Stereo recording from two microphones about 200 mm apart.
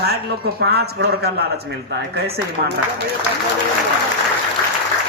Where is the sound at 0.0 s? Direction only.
55° right (ahead or behind).